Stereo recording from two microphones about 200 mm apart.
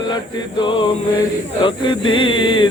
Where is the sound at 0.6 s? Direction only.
25° left (ahead or behind).